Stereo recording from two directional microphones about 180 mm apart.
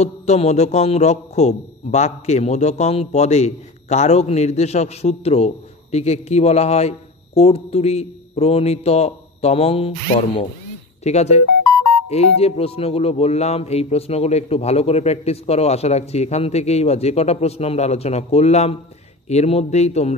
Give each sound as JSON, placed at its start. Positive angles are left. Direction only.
{"t": 0.0, "sound": "speech", "side_deg": 40}